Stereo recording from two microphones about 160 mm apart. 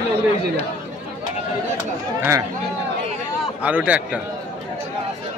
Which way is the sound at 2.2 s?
20° right (ahead or behind).